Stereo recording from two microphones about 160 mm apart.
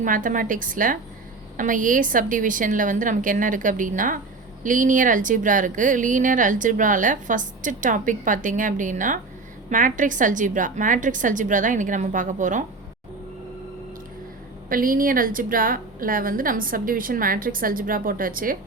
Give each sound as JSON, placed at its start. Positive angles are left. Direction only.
{"t": 0.0, "sound": "a woman's voice", "side_deg": -55}
{"t": 14.7, "sound": "a woman's voice", "side_deg": -60}